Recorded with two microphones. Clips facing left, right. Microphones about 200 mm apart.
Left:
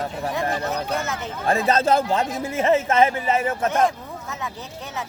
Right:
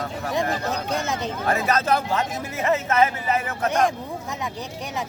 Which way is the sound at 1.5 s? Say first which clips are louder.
Left 3 dB; 25° left (ahead or behind).